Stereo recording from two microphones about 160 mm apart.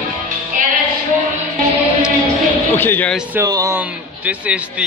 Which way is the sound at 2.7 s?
15° left (ahead or behind).